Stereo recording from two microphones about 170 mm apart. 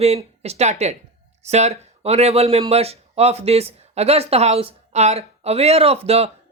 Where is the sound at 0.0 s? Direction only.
35° right (ahead or behind).